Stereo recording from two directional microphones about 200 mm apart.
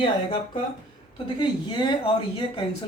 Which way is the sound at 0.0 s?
25° left (ahead or behind).